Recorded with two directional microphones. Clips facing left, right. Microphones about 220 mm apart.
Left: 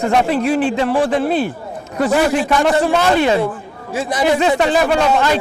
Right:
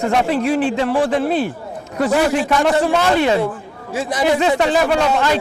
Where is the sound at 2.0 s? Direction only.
20° left (ahead or behind).